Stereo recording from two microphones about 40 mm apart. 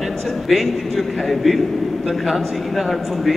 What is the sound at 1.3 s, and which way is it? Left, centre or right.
Speech, centre.